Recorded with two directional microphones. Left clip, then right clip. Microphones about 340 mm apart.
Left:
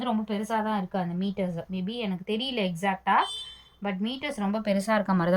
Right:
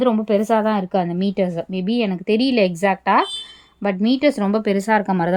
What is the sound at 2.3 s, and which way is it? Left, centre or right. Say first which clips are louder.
Speech: right 12 dB; centre.